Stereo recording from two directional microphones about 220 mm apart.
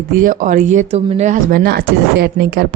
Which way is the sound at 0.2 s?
35° right (ahead or behind).